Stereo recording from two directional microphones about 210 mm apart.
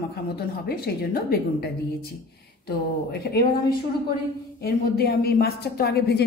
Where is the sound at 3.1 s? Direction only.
50° left (ahead or behind).